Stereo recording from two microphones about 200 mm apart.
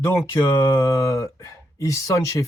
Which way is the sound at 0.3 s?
15° left (ahead or behind).